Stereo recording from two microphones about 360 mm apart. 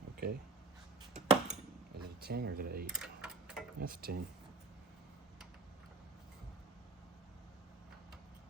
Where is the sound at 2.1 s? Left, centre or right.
Right.